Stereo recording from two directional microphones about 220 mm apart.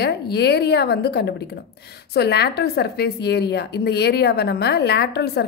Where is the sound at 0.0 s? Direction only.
50° left (ahead or behind).